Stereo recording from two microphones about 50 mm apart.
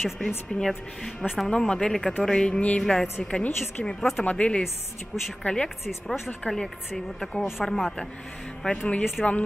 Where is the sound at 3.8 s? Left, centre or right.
Centre.